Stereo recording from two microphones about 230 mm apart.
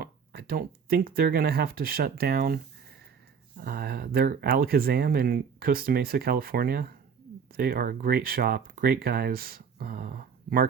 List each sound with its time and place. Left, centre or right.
0.0 s speech: right
3.6 s speech: right